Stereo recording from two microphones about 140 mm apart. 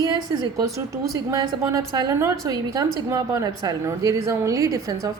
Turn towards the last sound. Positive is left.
turn(degrees=-25)  # may be behind; listen again after turning